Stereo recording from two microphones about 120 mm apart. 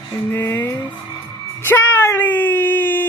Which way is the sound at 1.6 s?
20° left (ahead or behind).